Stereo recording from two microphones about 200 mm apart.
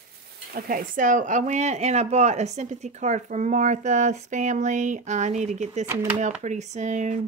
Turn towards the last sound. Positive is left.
turn(degrees=-35)  # may be behind; listen again after turning